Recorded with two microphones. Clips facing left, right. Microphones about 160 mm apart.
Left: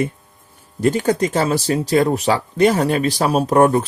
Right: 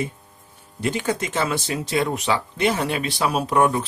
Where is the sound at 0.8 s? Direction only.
40° left (ahead or behind).